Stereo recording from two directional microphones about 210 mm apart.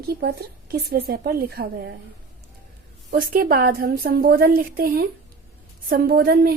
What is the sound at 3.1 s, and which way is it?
Speech, 45° right (ahead or behind).